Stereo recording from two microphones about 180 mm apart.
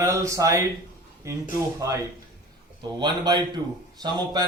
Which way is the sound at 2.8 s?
25° right (ahead or behind).